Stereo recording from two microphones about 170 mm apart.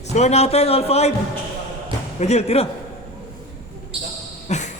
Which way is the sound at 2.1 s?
40° left (ahead or behind).